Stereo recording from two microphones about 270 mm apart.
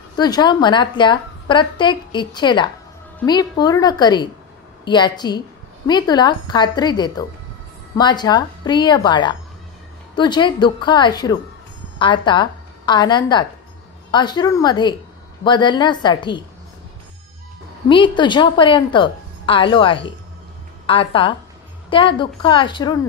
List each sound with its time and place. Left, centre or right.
0.1 s a woman's voice: centre
17.8 s a woman's voice: centre